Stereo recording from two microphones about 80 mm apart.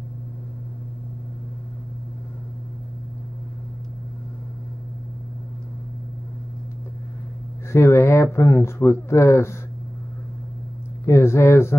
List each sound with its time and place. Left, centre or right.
7.7 s speech: left
11.1 s speech: left